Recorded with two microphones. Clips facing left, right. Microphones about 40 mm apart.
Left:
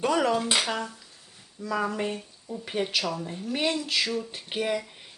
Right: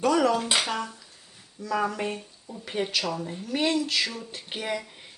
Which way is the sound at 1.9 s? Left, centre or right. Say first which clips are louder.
Left 1 dB; centre.